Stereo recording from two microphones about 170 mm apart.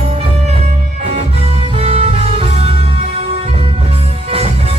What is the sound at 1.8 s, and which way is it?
Music, 35° right (ahead or behind).